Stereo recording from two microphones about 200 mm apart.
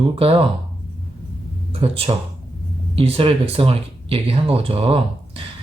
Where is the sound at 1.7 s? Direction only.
30° right (ahead or behind).